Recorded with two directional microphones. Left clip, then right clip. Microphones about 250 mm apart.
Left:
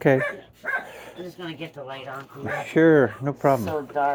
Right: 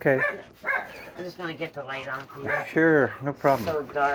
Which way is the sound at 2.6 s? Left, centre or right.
Left.